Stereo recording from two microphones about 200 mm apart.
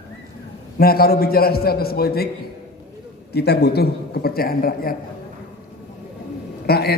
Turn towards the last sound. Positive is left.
turn(degrees=50)  # may be behind; listen again after turning